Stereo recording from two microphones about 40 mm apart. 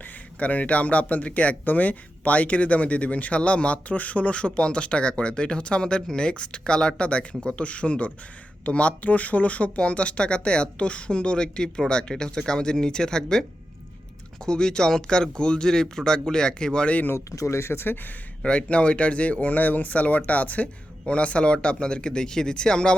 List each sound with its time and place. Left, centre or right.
0.3 s speech: left; by 13.4 s centre
14.4 s speech: centre
17.6 s speech: left
18.4 s speech: left
19.5 s speech: left